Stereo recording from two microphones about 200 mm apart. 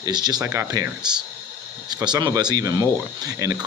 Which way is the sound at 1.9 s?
20° right (ahead or behind).